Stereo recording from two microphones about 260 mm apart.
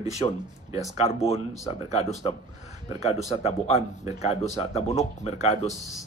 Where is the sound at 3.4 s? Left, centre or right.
Left.